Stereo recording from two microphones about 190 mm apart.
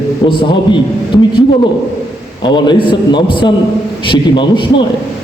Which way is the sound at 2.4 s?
25° left (ahead or behind).